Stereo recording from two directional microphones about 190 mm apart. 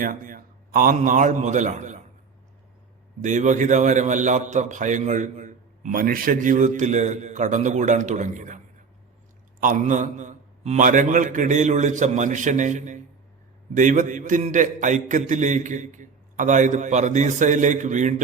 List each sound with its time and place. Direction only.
0.0 s a man's voice: 45° right (ahead or behind)
3.2 s a man's voice: 40° right (ahead or behind)
9.6 s a man's voice: 45° right (ahead or behind)